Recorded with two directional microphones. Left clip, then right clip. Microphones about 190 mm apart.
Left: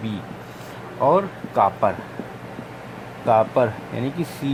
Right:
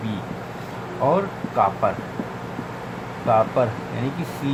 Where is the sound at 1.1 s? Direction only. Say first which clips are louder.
Left 2 dB; 50° left (ahead or behind).